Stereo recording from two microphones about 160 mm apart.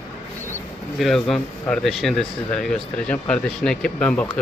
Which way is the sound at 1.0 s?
Centre (ahead or behind).